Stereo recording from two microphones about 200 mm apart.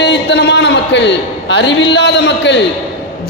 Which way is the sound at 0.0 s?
60° left (ahead or behind).